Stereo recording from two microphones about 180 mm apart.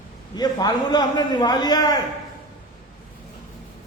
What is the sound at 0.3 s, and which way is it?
A man's voice, 20° left (ahead or behind).